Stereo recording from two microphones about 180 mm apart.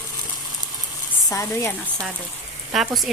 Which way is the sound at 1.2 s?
15° left (ahead or behind).